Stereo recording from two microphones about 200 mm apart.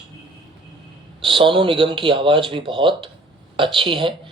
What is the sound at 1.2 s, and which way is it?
Speech, 25° right (ahead or behind).